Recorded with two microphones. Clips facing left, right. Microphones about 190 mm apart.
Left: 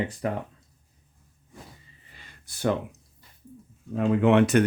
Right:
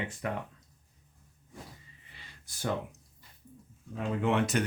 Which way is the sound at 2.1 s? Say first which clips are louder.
Left 3 dB; 60° left (ahead or behind).